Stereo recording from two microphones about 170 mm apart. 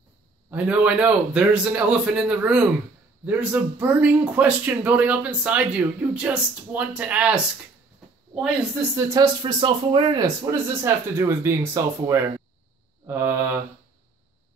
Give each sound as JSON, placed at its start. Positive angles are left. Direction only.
{"t": 0.5, "sound": "speech", "side_deg": -10}
{"t": 8.9, "sound": "speech", "side_deg": -20}